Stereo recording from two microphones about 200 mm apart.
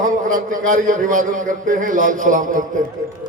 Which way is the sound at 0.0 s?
40° right (ahead or behind).